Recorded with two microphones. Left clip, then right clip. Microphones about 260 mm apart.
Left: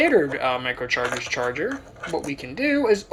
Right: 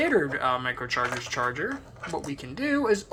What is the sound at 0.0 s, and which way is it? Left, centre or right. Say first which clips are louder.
Speech: left 5 dB; right.